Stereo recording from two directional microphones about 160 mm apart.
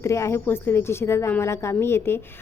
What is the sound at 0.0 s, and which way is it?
A woman's voice, 15° left (ahead or behind).